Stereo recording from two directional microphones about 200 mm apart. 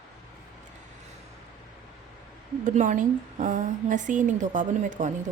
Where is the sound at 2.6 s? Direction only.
40° right (ahead or behind).